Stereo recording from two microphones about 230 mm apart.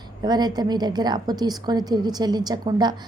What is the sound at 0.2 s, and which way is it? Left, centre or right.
A woman's voice, centre.